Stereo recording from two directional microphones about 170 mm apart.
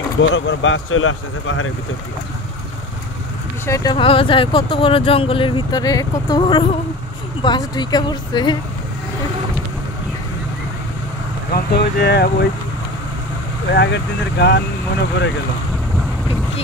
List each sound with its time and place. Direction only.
0.3 s speech: 90° left
3.6 s speech: 20° left (ahead or behind)
11.5 s speech: 70° left (ahead or behind)
13.7 s speech: 90° left